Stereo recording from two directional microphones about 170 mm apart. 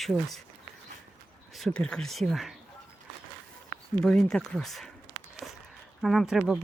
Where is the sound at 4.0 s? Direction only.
5° left (ahead or behind).